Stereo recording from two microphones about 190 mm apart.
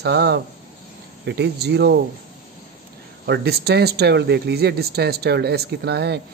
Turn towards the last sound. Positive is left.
turn(degrees=-60)  # may be behind; listen again after turning